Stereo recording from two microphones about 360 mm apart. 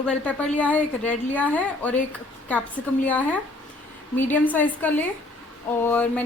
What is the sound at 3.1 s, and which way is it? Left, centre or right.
Speech, centre.